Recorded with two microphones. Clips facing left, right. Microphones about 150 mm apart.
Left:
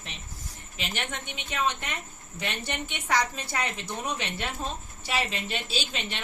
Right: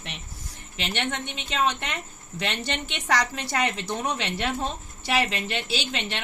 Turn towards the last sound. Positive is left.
turn(degrees=-80)